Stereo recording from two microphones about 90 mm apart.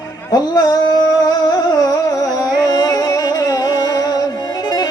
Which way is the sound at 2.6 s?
45° left (ahead or behind).